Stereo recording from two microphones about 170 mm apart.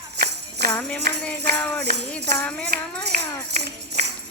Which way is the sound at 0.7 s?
10° left (ahead or behind).